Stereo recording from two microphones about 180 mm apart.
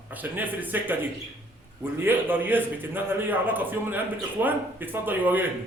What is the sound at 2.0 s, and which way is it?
A man's voice, 10° right (ahead or behind).